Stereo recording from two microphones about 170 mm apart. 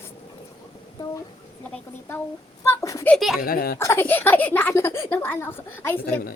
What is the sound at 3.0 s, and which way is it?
Speech, centre (ahead or behind).